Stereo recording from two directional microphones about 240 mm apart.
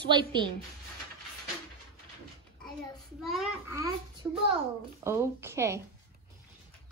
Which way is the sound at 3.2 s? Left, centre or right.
Centre.